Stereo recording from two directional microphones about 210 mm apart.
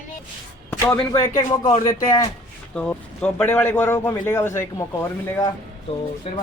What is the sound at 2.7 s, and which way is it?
A man's voice, 5° left (ahead or behind).